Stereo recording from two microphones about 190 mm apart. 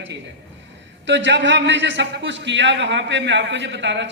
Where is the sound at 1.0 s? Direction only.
70° right (ahead or behind).